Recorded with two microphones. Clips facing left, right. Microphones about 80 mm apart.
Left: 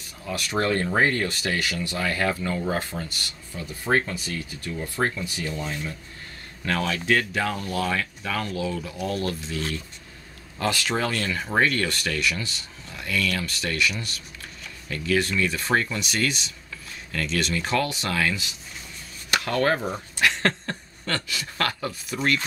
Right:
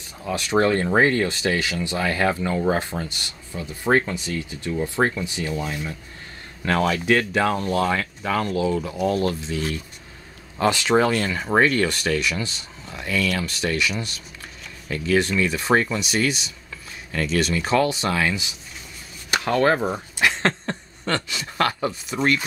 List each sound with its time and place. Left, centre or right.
0.2 s speech: right
7.1 s speech: right
11.6 s speech: centre
17.6 s speech: right
19.4 s speech: centre